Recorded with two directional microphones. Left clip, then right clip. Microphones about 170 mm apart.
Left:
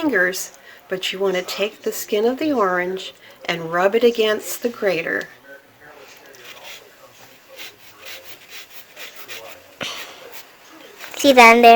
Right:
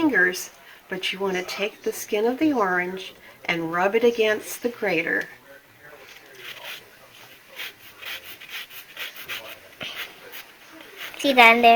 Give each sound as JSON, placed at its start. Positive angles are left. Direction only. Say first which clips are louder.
{"t": 0.0, "sound": "speech", "louder": "left 1 dB", "side_deg": 70}
{"t": 11.2, "sound": "speech", "louder": "left 5 dB", "side_deg": 70}